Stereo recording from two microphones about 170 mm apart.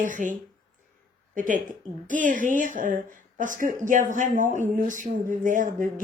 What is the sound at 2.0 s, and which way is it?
Speech, 50° right (ahead or behind).